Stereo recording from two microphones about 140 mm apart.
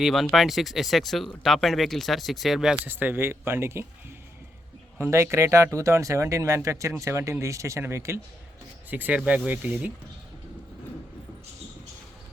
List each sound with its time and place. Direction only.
0.0 s speech: centre (ahead or behind)
2.8 s speech: 15° right (ahead or behind)
4.9 s speech: 20° right (ahead or behind)